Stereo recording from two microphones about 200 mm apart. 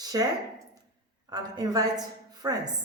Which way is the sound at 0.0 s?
20° right (ahead or behind).